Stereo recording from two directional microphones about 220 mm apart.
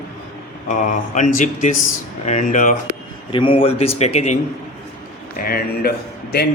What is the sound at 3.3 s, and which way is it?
A man's voice, 25° left (ahead or behind).